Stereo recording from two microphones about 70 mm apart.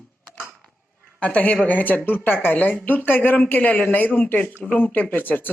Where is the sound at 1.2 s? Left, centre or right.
Left.